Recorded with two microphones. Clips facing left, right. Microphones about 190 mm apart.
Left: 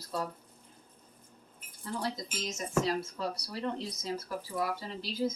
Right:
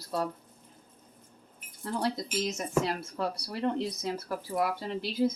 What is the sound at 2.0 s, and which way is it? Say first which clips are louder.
Speech: right 7 dB; 60° right (ahead or behind).